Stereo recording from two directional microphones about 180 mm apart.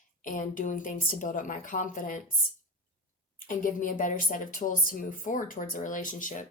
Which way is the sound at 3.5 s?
50° left (ahead or behind).